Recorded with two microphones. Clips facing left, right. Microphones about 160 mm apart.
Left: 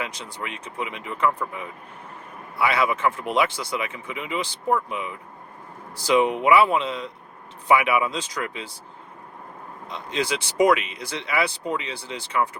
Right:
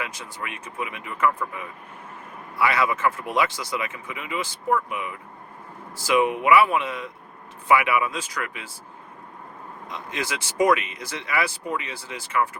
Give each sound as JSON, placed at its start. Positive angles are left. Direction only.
{"t": 0.0, "sound": "a man's voice", "side_deg": 20}
{"t": 9.9, "sound": "speech", "side_deg": 20}